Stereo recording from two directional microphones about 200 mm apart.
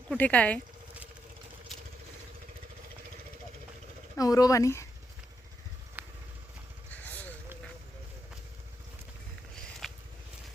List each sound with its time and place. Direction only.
0.1 s speech: 5° left (ahead or behind)
4.2 s speech: 20° left (ahead or behind)
6.0 s vehicle: 10° right (ahead or behind)
9.8 s a sound: centre (ahead or behind)